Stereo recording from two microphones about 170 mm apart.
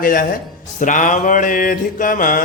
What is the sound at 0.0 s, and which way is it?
Speech, 55° left (ahead or behind).